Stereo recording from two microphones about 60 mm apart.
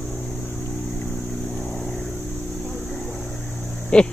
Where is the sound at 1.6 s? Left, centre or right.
Centre.